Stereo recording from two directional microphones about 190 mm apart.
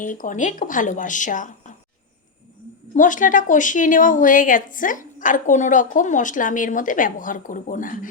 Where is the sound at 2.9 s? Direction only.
45° left (ahead or behind).